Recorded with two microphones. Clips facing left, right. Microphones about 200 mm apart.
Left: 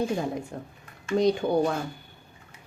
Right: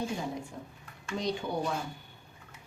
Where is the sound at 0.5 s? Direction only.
60° left (ahead or behind).